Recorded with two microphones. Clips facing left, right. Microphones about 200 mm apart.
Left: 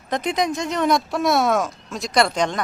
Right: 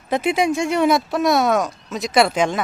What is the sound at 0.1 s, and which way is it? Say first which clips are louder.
Speech: right 4 dB; 10° right (ahead or behind).